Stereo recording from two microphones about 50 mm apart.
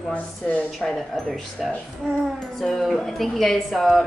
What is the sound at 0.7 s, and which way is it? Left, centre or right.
A woman's voice, centre.